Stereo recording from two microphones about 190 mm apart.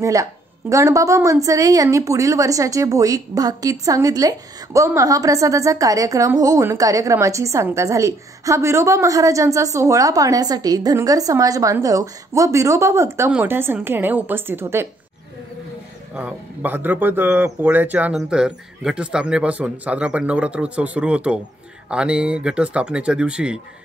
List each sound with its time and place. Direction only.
0.0 s a woman's voice: 15° right (ahead or behind)
16.2 s a woman's voice: 10° right (ahead or behind)